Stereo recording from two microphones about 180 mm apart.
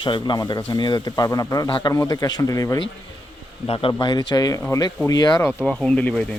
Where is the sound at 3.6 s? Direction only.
30° left (ahead or behind).